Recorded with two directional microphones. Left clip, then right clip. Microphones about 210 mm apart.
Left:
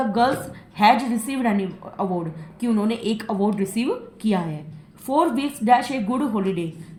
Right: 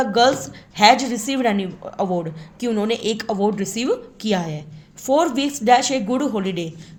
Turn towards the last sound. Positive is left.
turn(degrees=-45)  # may be behind; listen again after turning